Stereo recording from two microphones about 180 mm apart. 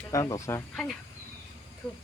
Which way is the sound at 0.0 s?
20° left (ahead or behind).